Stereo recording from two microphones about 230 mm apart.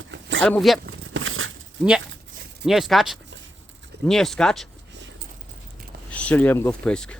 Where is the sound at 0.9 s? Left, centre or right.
Right.